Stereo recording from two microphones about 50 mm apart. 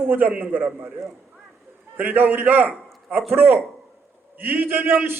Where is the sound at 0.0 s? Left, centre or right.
Right.